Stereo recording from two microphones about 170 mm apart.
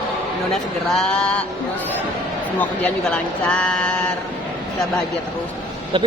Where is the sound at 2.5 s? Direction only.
5° left (ahead or behind).